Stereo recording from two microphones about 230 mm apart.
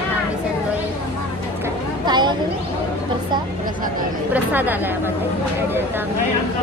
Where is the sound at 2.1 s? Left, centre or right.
Centre.